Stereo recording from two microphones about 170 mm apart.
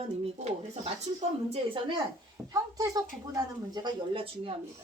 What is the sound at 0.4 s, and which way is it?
Speech, 40° right (ahead or behind).